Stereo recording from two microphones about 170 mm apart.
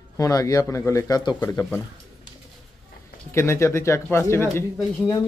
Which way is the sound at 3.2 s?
15° left (ahead or behind).